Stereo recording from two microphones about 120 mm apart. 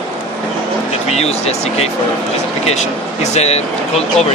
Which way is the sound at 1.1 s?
60° left (ahead or behind).